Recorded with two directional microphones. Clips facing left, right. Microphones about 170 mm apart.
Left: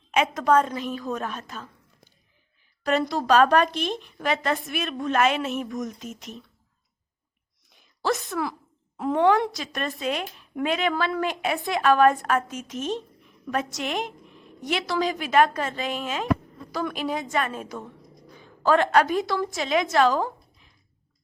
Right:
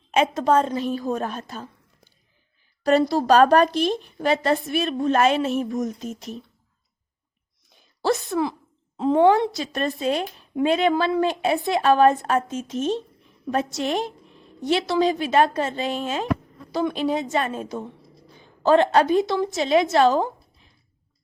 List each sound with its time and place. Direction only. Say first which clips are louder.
0.1 s speech: right 2 dB; 30° right (ahead or behind)
2.8 s speech: right 5 dB; 35° right (ahead or behind)
8.0 s a woman's voice: right 4 dB; 30° right (ahead or behind)